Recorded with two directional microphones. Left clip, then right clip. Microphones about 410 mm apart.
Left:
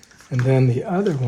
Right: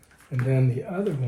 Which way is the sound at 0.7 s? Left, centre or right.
Centre.